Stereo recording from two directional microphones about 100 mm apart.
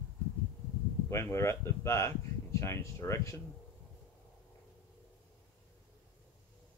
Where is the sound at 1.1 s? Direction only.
25° left (ahead or behind).